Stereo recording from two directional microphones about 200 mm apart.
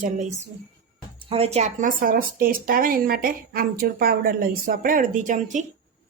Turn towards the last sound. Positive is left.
turn(degrees=-40)  # may be behind; listen again after turning